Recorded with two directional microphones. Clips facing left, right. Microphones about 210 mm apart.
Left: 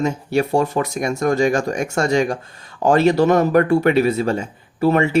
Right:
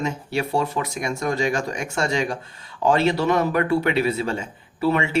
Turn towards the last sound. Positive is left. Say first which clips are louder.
# left 5 dB
turn(degrees=45)  # may be behind; listen again after turning